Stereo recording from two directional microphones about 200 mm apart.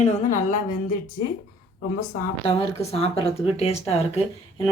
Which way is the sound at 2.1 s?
30° left (ahead or behind).